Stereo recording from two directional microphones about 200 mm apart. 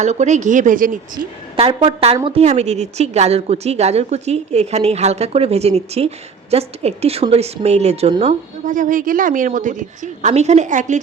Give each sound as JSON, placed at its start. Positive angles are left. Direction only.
{"t": 0.0, "sound": "a woman's voice", "side_deg": -35}
{"t": 1.5, "sound": "a woman's voice", "side_deg": -30}